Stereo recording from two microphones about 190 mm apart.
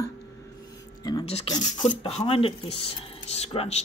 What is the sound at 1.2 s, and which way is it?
Speech, 30° left (ahead or behind).